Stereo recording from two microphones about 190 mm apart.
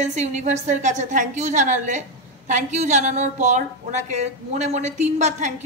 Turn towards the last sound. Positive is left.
turn(degrees=-35)  # may be behind; listen again after turning